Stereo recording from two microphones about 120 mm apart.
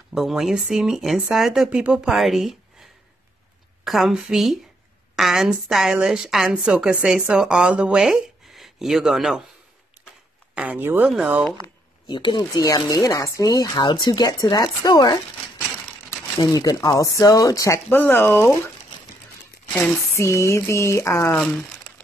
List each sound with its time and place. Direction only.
0.1 s a woman's voice: 5° right (ahead or behind)
3.8 s a woman's voice: centre (ahead or behind)
10.5 s speech: 10° right (ahead or behind)
11.6 s speech: 40° left (ahead or behind)
17.8 s speech: 15° left (ahead or behind)
20.2 s speech: 25° left (ahead or behind)